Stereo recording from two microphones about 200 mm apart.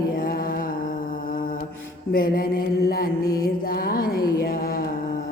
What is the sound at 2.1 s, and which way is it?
Mantra, 45° left (ahead or behind).